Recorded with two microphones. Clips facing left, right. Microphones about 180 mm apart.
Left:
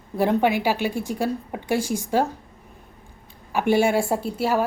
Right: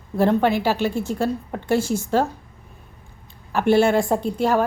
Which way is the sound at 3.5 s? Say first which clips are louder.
Right 3 dB; 15° left (ahead or behind).